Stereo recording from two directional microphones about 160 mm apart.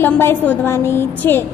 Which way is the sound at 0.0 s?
15° left (ahead or behind).